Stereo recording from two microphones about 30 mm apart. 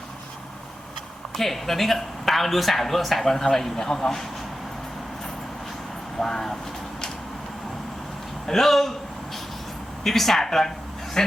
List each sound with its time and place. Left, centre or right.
1.4 s speech: centre
3.3 s a man's voice: centre
6.1 s a man's voice: centre
8.4 s speech: centre
10.0 s a man's voice: centre
11.2 s speech: left